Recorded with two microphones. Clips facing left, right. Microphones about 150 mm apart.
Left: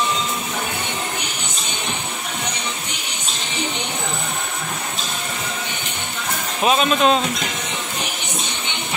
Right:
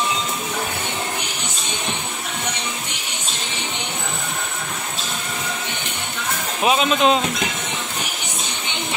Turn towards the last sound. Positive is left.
turn(degrees=-15)  # may be behind; listen again after turning